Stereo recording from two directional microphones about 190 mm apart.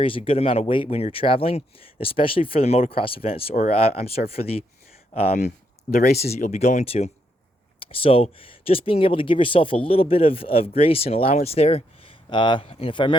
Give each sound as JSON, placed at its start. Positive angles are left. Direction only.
{"t": 0.0, "sound": "speech", "side_deg": 30}